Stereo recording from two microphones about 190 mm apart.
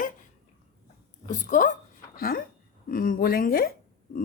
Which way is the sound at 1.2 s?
40° left (ahead or behind).